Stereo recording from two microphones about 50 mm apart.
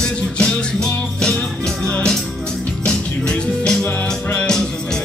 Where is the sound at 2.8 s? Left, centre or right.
Centre.